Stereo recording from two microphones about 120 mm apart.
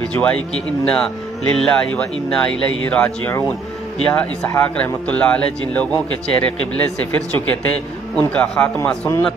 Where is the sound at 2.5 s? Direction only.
10° left (ahead or behind).